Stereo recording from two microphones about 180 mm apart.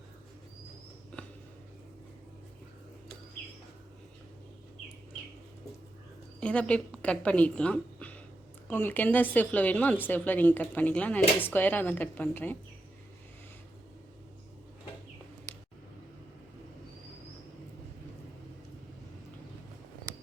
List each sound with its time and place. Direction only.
6.4 s a woman's voice: 5° left (ahead or behind)